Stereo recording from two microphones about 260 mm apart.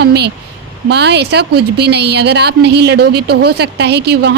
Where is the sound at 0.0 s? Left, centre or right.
Right.